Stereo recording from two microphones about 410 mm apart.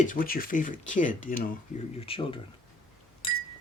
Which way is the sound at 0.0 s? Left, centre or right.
Centre.